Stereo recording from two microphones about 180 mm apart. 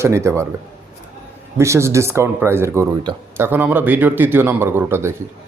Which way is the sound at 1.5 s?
15° right (ahead or behind).